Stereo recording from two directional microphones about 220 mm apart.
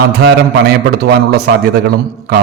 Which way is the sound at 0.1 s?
45° right (ahead or behind).